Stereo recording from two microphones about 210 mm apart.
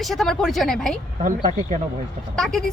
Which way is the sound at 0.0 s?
Centre (ahead or behind).